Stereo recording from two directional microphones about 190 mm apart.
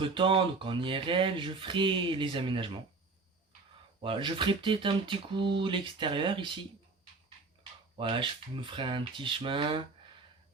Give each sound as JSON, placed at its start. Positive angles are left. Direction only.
{"t": 0.0, "sound": "speech", "side_deg": -25}
{"t": 4.0, "sound": "speech", "side_deg": -25}
{"t": 7.9, "sound": "speech", "side_deg": -25}